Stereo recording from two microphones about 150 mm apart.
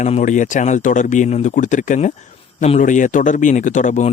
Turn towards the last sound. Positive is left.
turn(degrees=55)  # may be behind; listen again after turning